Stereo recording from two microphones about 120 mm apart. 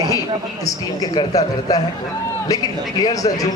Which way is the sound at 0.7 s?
30° left (ahead or behind).